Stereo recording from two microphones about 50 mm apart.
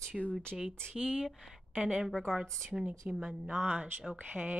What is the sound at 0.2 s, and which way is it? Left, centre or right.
Speech, left.